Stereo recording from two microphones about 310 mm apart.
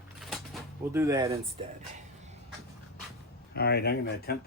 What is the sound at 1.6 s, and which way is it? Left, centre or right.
Speech, centre.